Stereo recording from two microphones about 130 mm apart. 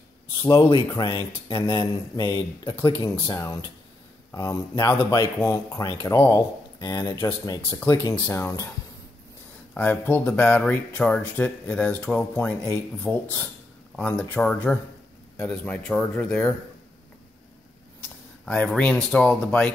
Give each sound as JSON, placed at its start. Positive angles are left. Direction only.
{"t": 0.4, "sound": "speech", "side_deg": 40}
{"t": 4.3, "sound": "speech", "side_deg": 25}
{"t": 9.8, "sound": "speech", "side_deg": 15}
{"t": 18.4, "sound": "speech", "side_deg": 5}